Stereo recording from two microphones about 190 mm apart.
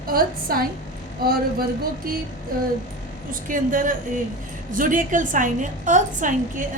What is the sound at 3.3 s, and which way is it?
A woman's voice, 45° right (ahead or behind).